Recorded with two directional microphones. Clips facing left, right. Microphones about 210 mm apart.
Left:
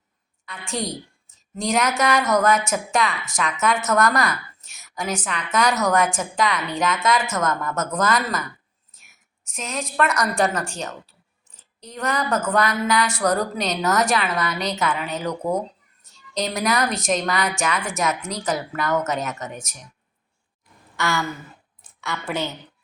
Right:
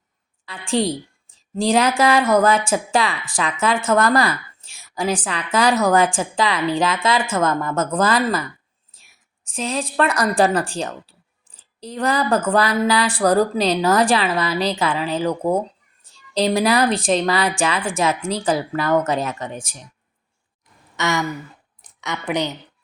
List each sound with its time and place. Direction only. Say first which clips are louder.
0.4 s a woman's voice: right 8 dB; 30° right (ahead or behind)
20.9 s a woman's voice: right 3 dB; 20° right (ahead or behind)